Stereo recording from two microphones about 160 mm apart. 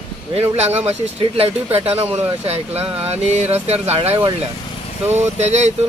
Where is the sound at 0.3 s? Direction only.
40° right (ahead or behind).